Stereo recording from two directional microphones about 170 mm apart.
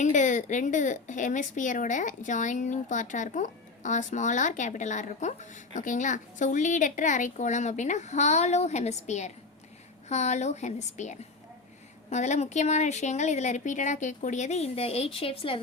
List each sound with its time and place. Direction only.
0.0 s speech: 45° left (ahead or behind)